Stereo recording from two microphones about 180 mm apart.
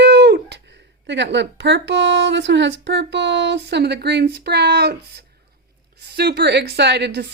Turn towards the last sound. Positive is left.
turn(degrees=-70)  # may be behind; listen again after turning